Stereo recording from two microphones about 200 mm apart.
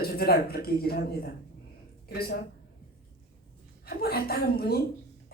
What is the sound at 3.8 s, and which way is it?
Speech, 50° left (ahead or behind).